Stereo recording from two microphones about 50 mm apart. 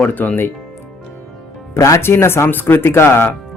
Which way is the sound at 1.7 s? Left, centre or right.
Left.